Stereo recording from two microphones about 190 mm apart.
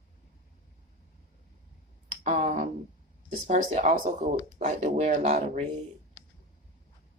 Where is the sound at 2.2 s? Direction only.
40° right (ahead or behind).